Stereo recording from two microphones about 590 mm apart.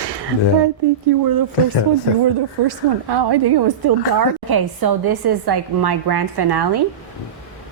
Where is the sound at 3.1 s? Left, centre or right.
Right.